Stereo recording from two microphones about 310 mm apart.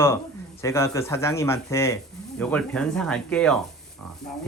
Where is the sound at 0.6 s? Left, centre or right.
Centre.